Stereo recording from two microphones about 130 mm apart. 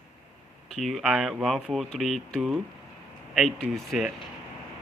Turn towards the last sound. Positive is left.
turn(degrees=0)  # may be behind; listen again after turning